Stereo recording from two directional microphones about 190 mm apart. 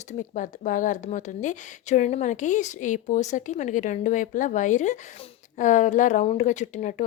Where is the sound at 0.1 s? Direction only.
40° left (ahead or behind).